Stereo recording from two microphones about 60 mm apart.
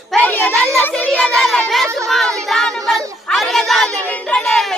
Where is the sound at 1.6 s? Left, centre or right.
Centre.